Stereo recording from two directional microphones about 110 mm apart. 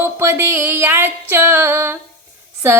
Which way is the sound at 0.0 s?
25° right (ahead or behind).